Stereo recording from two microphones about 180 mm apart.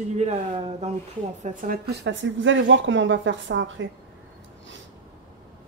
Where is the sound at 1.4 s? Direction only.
50° right (ahead or behind).